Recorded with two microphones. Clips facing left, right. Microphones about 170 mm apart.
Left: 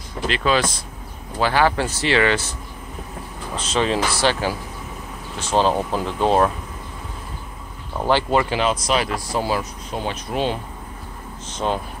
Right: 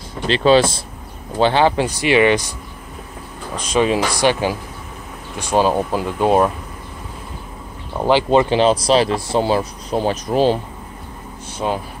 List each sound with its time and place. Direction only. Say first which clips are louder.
0.3 s speech: right 8 dB; 30° right (ahead or behind)
3.5 s speech: right 4 dB; 15° right (ahead or behind)
8.0 s speech: right 5 dB; 15° right (ahead or behind); by 10.6 s 35° right (ahead or behind)
11.5 s speech: right 1 dB; 10° right (ahead or behind)